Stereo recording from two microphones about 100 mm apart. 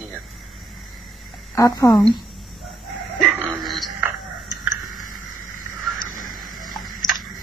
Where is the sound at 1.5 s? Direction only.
30° left (ahead or behind).